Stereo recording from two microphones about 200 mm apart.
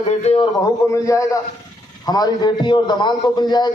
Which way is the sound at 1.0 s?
15° left (ahead or behind).